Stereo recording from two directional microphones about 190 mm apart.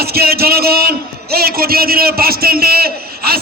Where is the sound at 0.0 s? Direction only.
55° right (ahead or behind).